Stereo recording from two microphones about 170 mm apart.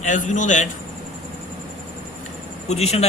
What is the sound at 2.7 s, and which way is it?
Speech, 40° left (ahead or behind).